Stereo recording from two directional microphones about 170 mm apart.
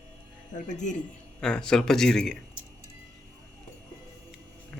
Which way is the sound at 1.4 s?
5° left (ahead or behind).